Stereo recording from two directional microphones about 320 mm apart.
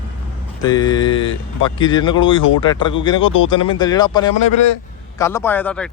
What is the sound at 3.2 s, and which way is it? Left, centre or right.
Speech, left.